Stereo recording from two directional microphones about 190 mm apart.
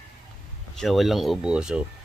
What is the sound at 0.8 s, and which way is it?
Speech, centre (ahead or behind).